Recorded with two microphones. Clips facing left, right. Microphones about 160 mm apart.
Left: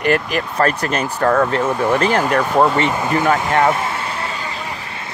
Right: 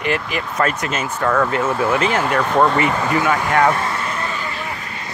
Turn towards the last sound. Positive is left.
turn(degrees=30)  # may be behind; listen again after turning